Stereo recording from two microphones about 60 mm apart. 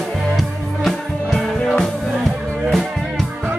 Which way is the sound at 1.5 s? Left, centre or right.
Centre.